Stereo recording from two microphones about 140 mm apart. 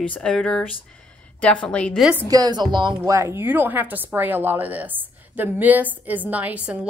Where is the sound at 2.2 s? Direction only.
25° right (ahead or behind).